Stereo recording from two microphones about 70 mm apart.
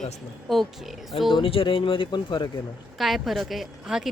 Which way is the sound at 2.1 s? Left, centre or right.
Left.